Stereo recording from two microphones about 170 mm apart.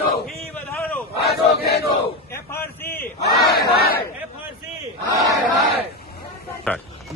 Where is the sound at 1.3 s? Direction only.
70° left (ahead or behind).